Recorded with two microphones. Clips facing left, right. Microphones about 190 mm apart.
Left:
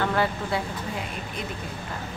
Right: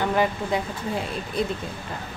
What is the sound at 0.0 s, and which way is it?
Speech, 15° right (ahead or behind).